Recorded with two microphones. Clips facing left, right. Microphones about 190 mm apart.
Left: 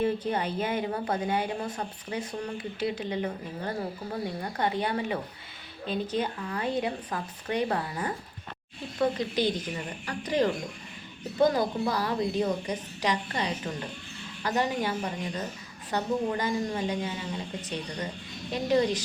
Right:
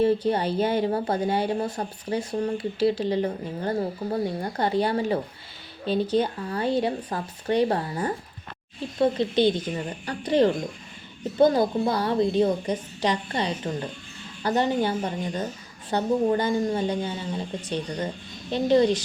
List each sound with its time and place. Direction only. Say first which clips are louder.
0.3 s a woman's voice: right 6 dB; 35° right (ahead or behind)